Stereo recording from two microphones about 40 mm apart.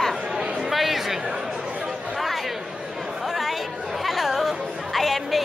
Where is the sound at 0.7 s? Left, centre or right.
Centre.